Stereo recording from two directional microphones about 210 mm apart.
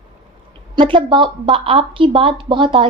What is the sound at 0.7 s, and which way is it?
A woman's voice, 25° right (ahead or behind).